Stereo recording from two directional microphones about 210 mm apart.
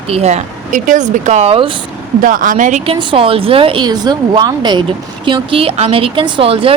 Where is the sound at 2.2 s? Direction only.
40° right (ahead or behind).